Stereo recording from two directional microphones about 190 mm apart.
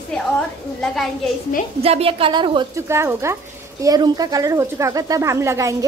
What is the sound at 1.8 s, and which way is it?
A woman's voice, 30° right (ahead or behind).